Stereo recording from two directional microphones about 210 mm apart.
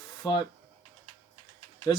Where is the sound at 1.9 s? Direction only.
15° left (ahead or behind).